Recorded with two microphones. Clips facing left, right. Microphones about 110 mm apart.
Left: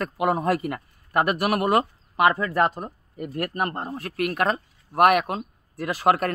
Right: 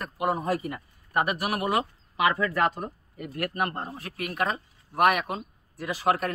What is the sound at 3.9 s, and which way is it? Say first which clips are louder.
Speech: left 8 dB; 60° left (ahead or behind).